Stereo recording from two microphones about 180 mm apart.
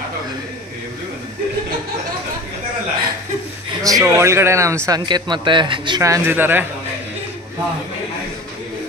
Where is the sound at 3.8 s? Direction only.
15° right (ahead or behind).